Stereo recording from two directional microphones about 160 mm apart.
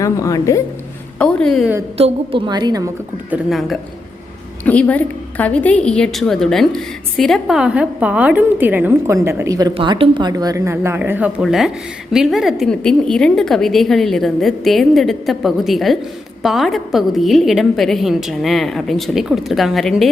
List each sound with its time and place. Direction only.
0.0 s a woman's voice: 20° left (ahead or behind)
1.2 s a woman's voice: 5° left (ahead or behind)
2.0 s a woman's voice: 35° right (ahead or behind)
3.2 s a woman's voice: 5° right (ahead or behind)
4.6 s a woman's voice: 10° left (ahead or behind)